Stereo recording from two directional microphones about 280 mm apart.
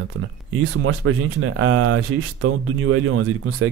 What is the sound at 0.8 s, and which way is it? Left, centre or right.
Speech, right.